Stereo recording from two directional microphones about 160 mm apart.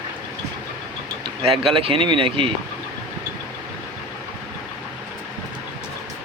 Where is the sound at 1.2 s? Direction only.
35° right (ahead or behind).